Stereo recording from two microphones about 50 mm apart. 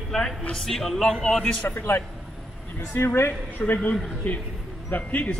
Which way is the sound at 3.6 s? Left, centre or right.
Left.